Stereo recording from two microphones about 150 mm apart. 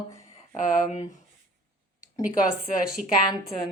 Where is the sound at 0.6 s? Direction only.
60° left (ahead or behind).